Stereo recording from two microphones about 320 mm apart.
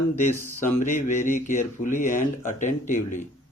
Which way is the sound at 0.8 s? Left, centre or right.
Left.